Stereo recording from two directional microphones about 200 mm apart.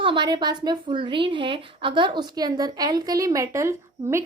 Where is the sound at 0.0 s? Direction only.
25° right (ahead or behind).